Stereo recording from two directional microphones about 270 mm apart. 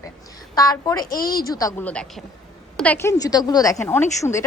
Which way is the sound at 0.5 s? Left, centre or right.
Centre.